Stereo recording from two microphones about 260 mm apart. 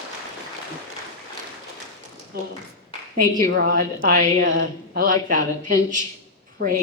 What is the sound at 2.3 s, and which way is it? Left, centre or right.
Speech, right.